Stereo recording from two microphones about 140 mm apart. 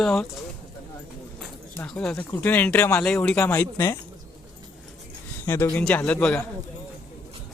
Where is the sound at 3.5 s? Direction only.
20° left (ahead or behind).